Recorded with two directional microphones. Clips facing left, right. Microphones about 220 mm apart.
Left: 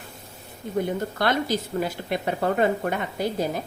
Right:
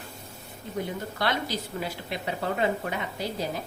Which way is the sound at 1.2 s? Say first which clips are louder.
Left 5 dB; 50° left (ahead or behind).